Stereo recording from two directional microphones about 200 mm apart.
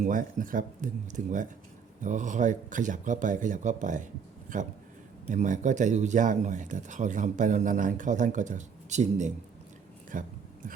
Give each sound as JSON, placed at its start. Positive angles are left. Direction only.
{"t": 0.0, "sound": "speech", "side_deg": -40}